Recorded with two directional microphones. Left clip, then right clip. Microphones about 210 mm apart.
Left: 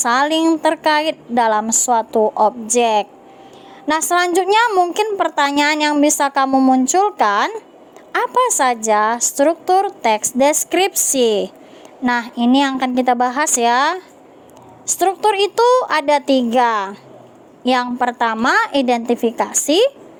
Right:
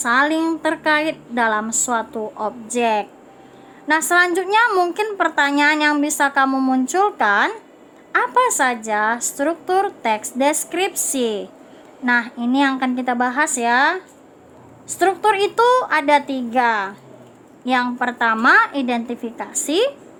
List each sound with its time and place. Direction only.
0.0 s a woman's voice: 35° left (ahead or behind)
0.4 s speech: 25° left (ahead or behind)
0.7 s a woman's voice: 35° left (ahead or behind)